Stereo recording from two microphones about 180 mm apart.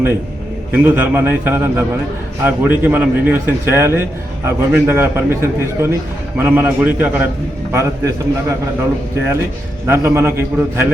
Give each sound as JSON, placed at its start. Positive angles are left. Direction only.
{"t": 0.7, "sound": "a man's voice", "side_deg": -10}
{"t": 9.8, "sound": "a man's voice", "side_deg": -15}